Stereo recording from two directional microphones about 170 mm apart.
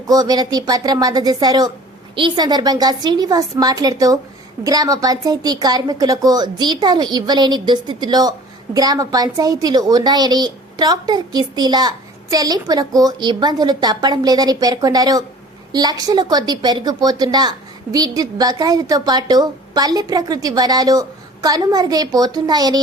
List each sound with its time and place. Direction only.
0.1 s a woman's voice: 20° right (ahead or behind)